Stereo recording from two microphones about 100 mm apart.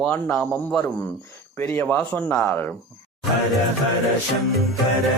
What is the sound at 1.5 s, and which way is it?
Speech, 20° left (ahead or behind).